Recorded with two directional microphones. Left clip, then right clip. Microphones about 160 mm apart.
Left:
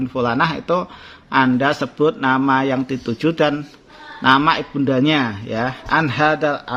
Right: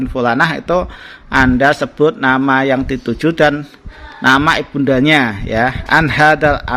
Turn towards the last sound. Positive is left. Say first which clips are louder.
# right 7 dB
turn(degrees=-35)  # may be behind; listen again after turning